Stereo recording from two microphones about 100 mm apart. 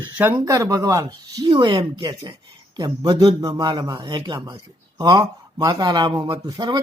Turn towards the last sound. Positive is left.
turn(degrees=-40)  # may be behind; listen again after turning